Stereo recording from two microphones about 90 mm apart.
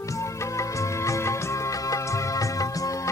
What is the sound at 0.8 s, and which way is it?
Music, 35° left (ahead or behind).